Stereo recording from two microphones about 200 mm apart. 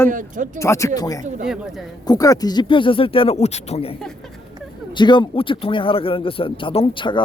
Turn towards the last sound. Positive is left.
turn(degrees=25)  # may be behind; listen again after turning